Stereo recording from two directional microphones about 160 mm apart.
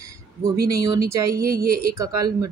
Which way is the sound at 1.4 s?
65° right (ahead or behind).